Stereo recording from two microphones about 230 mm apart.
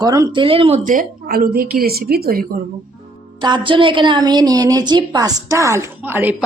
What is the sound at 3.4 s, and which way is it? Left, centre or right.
A woman's voice, centre.